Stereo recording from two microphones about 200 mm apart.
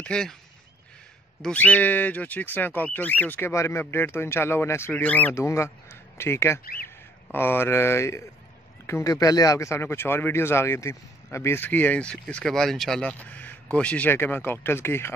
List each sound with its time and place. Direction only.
0.0 s speech: 5° left (ahead or behind)
1.4 s speech: 5° left (ahead or behind)
6.6 s speech: 45° left (ahead or behind)
7.3 s speech: 10° left (ahead or behind)